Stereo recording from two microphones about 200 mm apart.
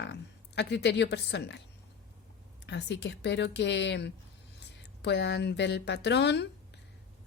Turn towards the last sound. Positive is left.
turn(degrees=60)  # may be behind; listen again after turning